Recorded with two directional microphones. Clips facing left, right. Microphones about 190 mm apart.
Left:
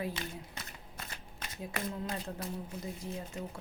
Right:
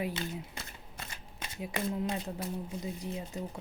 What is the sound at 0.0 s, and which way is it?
Speech, 25° right (ahead or behind).